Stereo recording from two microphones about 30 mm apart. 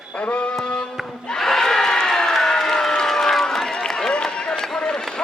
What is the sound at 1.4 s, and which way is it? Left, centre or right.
Crowd, centre.